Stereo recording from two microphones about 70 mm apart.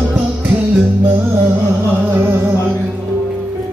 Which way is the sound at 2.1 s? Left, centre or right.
Right.